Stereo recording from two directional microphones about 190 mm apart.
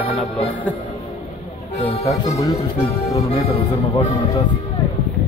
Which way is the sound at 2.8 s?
30° left (ahead or behind).